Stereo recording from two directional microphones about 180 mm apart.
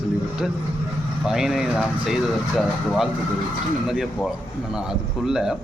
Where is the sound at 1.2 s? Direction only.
5° right (ahead or behind).